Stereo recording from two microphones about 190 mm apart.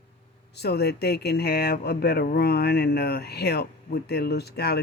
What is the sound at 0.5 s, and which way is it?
Speech, 60° left (ahead or behind).